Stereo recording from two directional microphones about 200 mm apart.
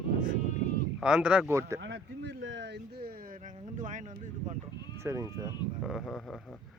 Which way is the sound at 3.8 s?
40° right (ahead or behind).